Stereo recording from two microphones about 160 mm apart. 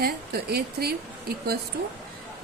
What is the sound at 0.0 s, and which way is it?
Speech, 75° right (ahead or behind).